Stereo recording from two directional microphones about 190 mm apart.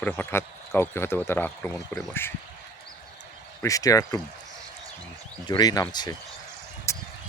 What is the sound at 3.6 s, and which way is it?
Speech, 20° left (ahead or behind).